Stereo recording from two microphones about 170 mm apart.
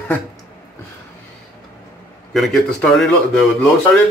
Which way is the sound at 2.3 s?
Centre (ahead or behind).